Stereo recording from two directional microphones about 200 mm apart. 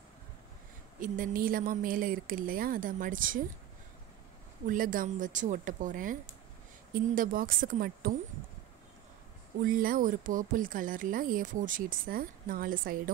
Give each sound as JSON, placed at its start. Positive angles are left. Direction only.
{"t": 0.9, "sound": "speech", "side_deg": -40}
{"t": 4.6, "sound": "speech", "side_deg": -45}
{"t": 9.7, "sound": "speech", "side_deg": -45}